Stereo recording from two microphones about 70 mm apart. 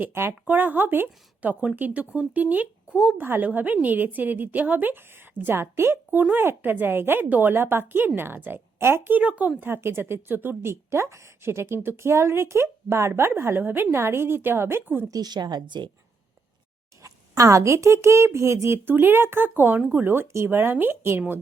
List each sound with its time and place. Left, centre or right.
0.0 s a woman's voice: right; by 3.2 s centre
3.2 s a woman's voice: right
9.1 s a woman's voice: right
9.6 s speech: right
15.1 s speech: right
17.0 s a woman's voice: right
18.9 s speech: right